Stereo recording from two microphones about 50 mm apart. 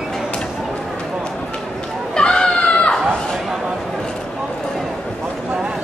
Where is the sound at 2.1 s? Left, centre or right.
Centre.